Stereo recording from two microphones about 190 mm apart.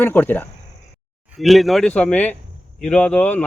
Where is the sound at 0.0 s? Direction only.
10° left (ahead or behind).